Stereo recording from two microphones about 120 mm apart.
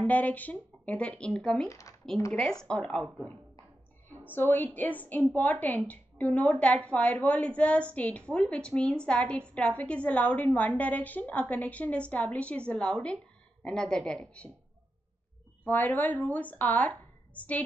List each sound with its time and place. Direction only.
0.0 s a woman's voice: 15° left (ahead or behind)
1.7 s speech: 25° left (ahead or behind)
2.3 s a woman's voice: 5° left (ahead or behind)
4.3 s a woman's voice: 15° left (ahead or behind)
15.6 s speech: 15° left (ahead or behind)